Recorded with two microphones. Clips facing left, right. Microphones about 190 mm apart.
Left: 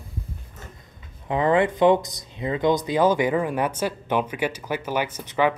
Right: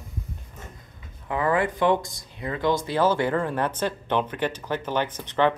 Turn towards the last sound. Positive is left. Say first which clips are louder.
# even
turn(degrees=10)  # may be behind; listen again after turning